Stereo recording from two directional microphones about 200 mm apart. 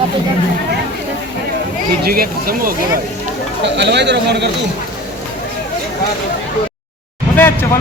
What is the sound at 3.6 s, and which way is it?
Speech, 60° right (ahead or behind).